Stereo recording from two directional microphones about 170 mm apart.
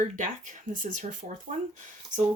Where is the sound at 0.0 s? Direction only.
50° right (ahead or behind).